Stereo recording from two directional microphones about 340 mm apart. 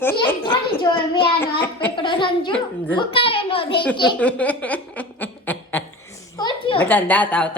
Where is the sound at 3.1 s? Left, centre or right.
Centre.